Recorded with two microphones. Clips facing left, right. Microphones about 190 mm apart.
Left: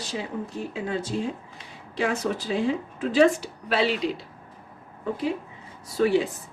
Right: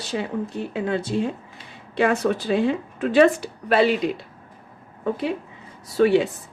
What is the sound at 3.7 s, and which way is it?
Speech, 50° right (ahead or behind).